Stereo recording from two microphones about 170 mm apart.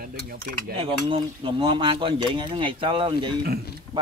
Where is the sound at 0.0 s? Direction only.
60° right (ahead or behind).